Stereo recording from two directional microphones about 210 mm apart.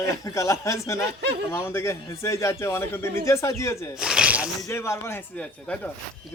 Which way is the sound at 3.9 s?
5° right (ahead or behind).